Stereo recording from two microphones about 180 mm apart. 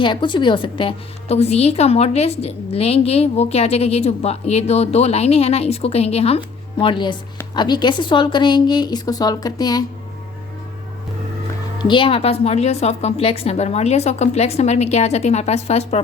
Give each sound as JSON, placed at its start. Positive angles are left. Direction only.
{"t": 0.0, "sound": "a woman's voice", "side_deg": 25}
{"t": 11.8, "sound": "a woman's voice", "side_deg": 25}